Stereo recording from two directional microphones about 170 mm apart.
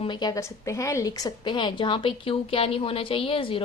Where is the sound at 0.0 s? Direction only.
25° left (ahead or behind).